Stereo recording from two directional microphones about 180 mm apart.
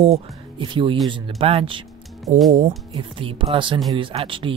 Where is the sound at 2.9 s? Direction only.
30° right (ahead or behind).